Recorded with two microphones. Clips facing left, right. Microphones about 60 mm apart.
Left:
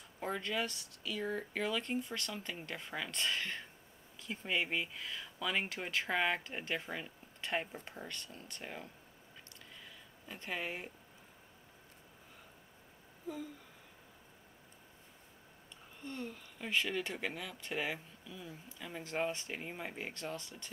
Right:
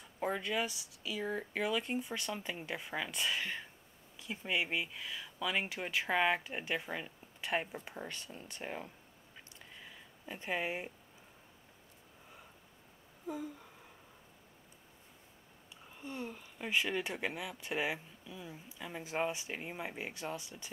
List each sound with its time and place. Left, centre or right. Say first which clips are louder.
0.2 s speech: right 2 dB; centre
9.8 s a sound: right 5 dB; centre
16.0 s speech: right 1 dB; centre